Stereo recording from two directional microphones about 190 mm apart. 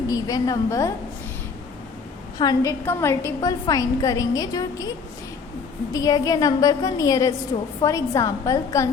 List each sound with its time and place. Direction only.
0.1 s a woman's voice: 20° left (ahead or behind)
2.4 s a woman's voice: 20° left (ahead or behind)
5.9 s a woman's voice: 20° left (ahead or behind)